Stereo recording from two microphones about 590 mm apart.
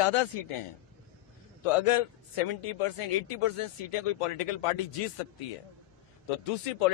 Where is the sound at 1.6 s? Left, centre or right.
Left.